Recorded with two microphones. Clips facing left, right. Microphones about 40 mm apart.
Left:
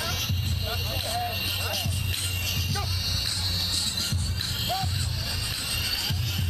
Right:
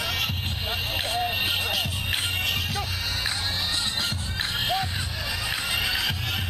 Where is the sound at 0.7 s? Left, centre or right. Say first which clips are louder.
Right 4 dB; right.